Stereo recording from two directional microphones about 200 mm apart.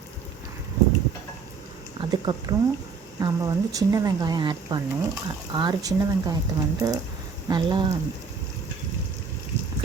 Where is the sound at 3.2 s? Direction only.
20° right (ahead or behind).